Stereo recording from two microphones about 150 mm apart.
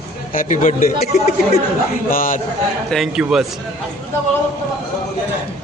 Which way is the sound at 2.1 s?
70° left (ahead or behind).